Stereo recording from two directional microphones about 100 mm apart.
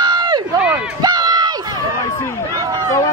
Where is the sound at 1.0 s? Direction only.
45° right (ahead or behind).